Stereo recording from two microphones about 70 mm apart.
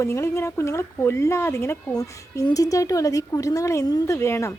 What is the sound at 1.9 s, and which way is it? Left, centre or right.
A woman's voice, left.